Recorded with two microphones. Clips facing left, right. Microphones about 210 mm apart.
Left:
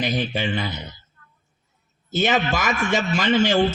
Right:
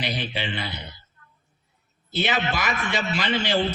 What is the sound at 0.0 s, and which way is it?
Speech, 45° left (ahead or behind).